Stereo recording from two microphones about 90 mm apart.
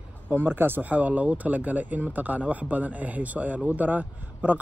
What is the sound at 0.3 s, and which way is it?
Speech, 25° right (ahead or behind).